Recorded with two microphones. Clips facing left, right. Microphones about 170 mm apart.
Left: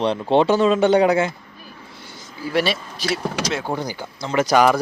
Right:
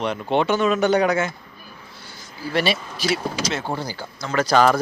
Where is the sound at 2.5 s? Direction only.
Centre (ahead or behind).